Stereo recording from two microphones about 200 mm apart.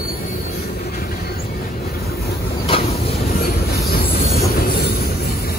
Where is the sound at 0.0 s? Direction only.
45° left (ahead or behind).